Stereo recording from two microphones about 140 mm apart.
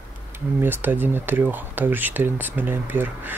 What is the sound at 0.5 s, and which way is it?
Speech, 15° right (ahead or behind).